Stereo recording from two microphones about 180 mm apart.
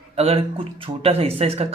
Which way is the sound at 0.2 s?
35° right (ahead or behind).